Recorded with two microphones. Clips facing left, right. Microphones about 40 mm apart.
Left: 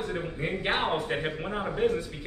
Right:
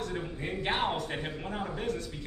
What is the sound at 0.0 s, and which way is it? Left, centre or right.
A man's voice, left.